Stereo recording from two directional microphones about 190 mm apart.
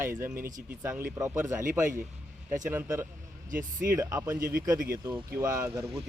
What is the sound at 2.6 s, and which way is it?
Speech, 10° right (ahead or behind).